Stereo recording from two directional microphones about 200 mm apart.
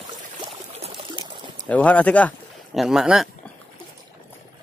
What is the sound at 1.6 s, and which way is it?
Speech, 5° left (ahead or behind).